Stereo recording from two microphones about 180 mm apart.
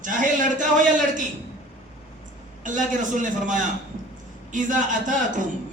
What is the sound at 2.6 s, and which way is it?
A man's voice, 45° right (ahead or behind).